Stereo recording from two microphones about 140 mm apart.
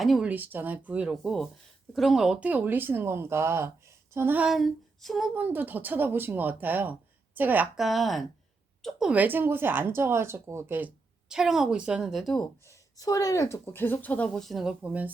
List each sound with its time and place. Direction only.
0.0 s speech: centre (ahead or behind)
0.3 s speech: 15° right (ahead or behind)
5.4 s speech: 10° right (ahead or behind)
7.8 s speech: centre (ahead or behind)
12.6 s speech: 25° left (ahead or behind); by 15.1 s 10° right (ahead or behind)